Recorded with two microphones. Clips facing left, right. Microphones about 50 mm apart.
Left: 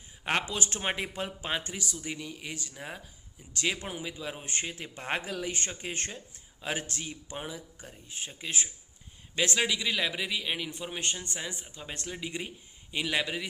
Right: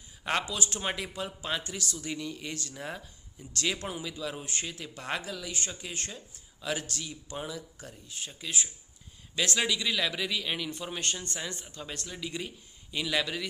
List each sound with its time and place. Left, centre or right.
0.4 s speech: left
9.3 s speech: left